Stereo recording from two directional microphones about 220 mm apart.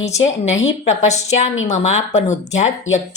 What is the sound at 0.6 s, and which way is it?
A woman's voice, 30° left (ahead or behind).